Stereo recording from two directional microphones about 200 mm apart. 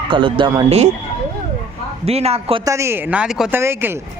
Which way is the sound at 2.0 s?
30° right (ahead or behind).